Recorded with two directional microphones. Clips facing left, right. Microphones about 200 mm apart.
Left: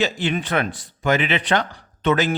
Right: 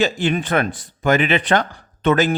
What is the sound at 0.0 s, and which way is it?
Speech, 50° right (ahead or behind).